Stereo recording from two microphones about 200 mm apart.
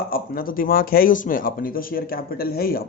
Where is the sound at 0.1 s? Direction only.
45° left (ahead or behind).